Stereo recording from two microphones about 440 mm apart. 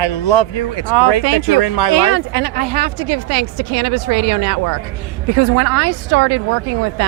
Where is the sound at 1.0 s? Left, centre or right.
Left.